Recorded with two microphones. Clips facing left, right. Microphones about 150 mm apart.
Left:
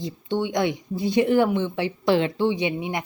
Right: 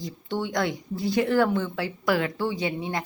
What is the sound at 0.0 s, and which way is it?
A woman's voice, 20° left (ahead or behind).